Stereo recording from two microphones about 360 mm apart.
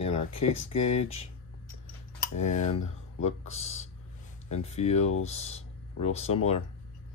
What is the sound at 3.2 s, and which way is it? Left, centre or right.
Speech, left.